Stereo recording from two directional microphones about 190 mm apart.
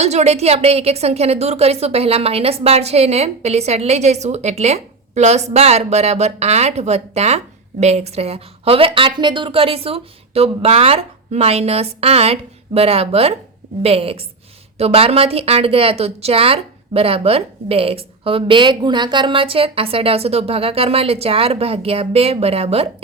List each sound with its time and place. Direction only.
0.0 s a woman's voice: 35° right (ahead or behind)